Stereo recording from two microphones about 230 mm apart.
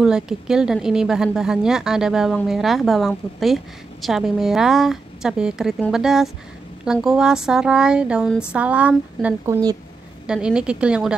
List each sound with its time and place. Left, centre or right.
0.0 s a woman's voice: centre